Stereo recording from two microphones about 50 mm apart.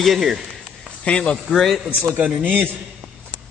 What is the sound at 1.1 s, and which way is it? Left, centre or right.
Speech, centre.